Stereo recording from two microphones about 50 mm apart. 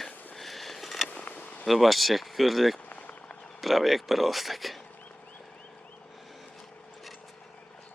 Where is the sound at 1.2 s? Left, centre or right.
Left.